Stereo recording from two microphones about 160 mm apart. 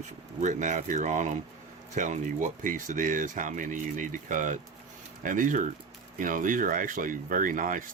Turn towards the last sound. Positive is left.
turn(degrees=-55)  # may be behind; listen again after turning